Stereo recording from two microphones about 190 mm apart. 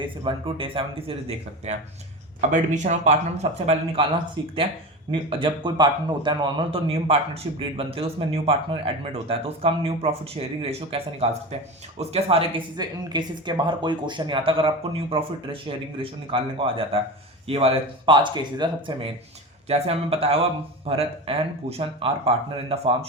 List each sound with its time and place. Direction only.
0.0 s speech: 25° right (ahead or behind)
5.3 s speech: 25° right (ahead or behind)